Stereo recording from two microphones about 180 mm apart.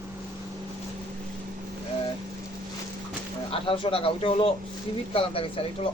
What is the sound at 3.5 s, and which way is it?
Speech, 30° left (ahead or behind).